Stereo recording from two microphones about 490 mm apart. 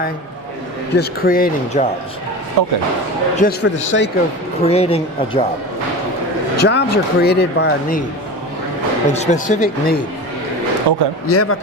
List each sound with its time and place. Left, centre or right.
0.9 s speech: centre
2.6 s speech: right
3.3 s speech: centre
4.6 s speech: centre
6.6 s speech: centre
9.0 s speech: centre
10.9 s speech: right
11.3 s speech: left